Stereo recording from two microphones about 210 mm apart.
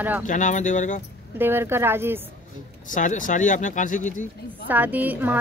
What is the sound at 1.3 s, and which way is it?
Speech, 10° right (ahead or behind).